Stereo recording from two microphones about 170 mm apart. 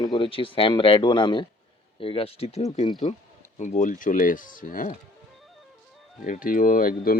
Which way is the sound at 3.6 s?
45° left (ahead or behind).